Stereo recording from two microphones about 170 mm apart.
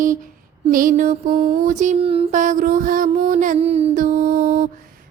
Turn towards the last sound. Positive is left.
turn(degrees=-55)  # may be behind; listen again after turning